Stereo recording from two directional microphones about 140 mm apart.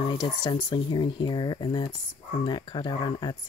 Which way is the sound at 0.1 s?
30° left (ahead or behind).